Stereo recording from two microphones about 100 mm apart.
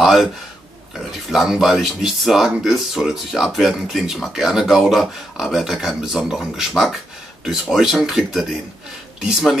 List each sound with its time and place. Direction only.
0.0 s speech: 5° right (ahead or behind)
1.3 s speech: 5° right (ahead or behind)